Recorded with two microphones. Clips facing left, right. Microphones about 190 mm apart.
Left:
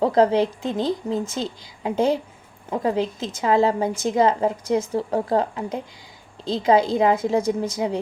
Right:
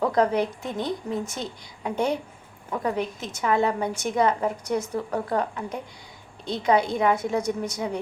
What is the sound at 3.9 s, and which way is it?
Speech, 90° left.